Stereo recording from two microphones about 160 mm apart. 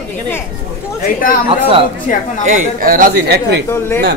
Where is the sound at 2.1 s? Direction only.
55° left (ahead or behind).